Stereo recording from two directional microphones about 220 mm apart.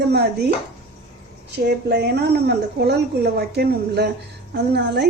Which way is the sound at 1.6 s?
45° right (ahead or behind).